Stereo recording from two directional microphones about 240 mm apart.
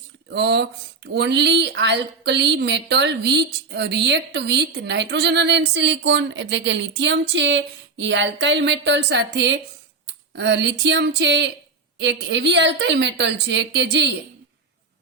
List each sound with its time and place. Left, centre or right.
0.3 s speech: right